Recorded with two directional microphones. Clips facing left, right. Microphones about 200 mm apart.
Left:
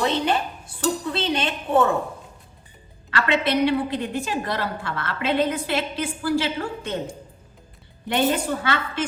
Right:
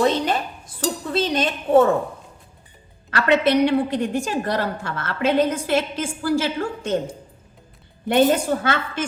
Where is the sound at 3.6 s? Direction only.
45° right (ahead or behind).